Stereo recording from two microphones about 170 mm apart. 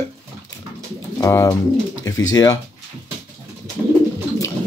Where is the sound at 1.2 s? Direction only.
20° left (ahead or behind).